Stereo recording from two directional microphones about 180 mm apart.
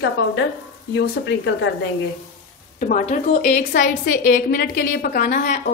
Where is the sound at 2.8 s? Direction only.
45° left (ahead or behind).